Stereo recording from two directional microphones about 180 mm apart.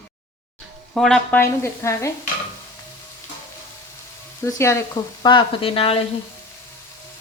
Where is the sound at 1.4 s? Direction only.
15° left (ahead or behind).